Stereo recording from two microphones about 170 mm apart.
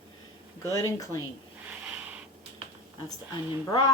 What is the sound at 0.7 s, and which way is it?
Speech, 20° left (ahead or behind).